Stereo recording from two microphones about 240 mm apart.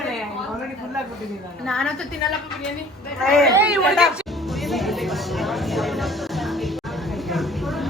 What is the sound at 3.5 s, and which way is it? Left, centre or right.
Music, centre.